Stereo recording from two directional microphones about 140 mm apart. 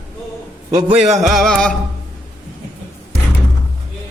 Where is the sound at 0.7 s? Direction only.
30° right (ahead or behind).